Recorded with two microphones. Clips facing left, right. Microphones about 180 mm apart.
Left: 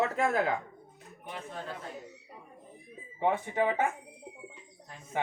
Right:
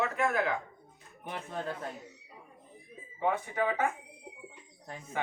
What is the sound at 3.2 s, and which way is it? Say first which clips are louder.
Speech: left 2 dB; 25° left (ahead or behind).